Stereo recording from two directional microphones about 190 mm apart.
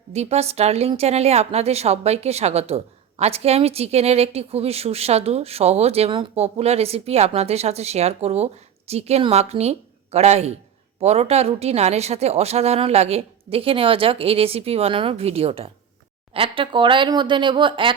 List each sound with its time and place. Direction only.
0.1 s speech: 35° right (ahead or behind)